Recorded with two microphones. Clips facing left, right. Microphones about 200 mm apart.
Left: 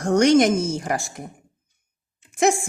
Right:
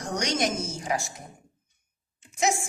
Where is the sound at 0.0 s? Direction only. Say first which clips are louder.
Left 12 dB; 55° left (ahead or behind).